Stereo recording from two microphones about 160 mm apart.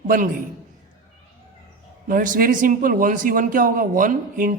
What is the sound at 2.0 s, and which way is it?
A man's voice, 55° right (ahead or behind).